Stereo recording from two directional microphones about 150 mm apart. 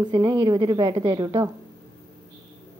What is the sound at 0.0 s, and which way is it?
A woman's voice, 30° right (ahead or behind).